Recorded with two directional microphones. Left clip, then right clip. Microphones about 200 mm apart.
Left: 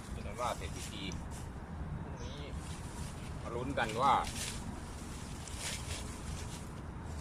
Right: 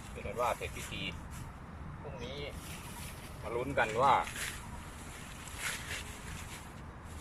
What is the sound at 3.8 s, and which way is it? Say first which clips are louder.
Speech: right 2 dB; 5° right (ahead or behind).